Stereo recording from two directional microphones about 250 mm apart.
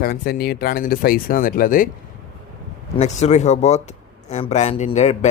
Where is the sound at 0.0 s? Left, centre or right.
Left.